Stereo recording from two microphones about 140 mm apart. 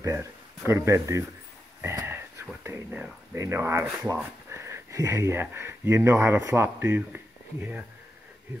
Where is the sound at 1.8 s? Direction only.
20° right (ahead or behind).